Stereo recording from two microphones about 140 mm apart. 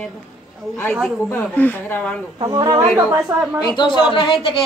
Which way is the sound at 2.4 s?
30° right (ahead or behind).